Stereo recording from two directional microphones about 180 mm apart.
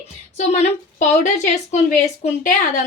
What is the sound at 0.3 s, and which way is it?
A woman's voice, 40° left (ahead or behind).